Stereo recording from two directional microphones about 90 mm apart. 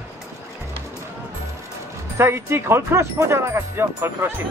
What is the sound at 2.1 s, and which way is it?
Speech, 30° right (ahead or behind).